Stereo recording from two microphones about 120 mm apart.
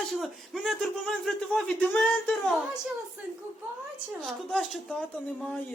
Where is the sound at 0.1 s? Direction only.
Centre (ahead or behind).